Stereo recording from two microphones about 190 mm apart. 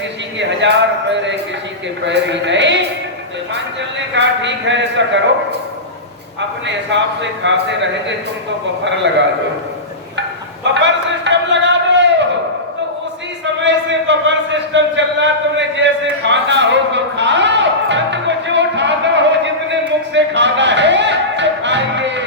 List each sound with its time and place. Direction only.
0.3 s a man's voice: 70° right (ahead or behind)
6.7 s a man's voice: 70° right (ahead or behind)
10.6 s a sound: 70° right (ahead or behind)
13.4 s a man's voice: 70° right (ahead or behind)
20.1 s music: 70° right (ahead or behind)